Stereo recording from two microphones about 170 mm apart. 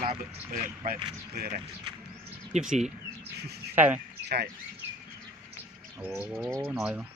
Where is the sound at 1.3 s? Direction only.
55° right (ahead or behind).